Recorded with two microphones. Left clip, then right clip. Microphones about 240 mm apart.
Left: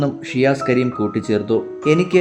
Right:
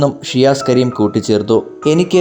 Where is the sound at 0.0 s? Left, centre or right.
Centre.